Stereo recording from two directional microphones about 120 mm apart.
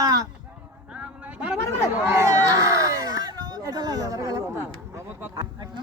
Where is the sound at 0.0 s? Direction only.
30° right (ahead or behind).